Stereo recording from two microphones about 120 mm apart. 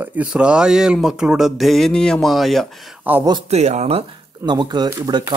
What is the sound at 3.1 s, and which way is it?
Speech, 15° right (ahead or behind).